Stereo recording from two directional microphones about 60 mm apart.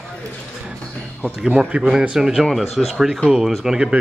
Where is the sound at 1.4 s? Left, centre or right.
Centre.